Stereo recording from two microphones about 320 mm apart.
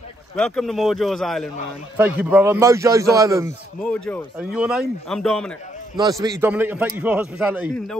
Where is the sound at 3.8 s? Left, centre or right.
Centre.